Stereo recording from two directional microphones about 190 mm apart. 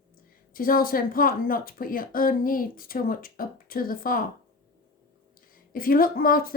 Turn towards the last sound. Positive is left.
turn(degrees=50)  # may be behind; listen again after turning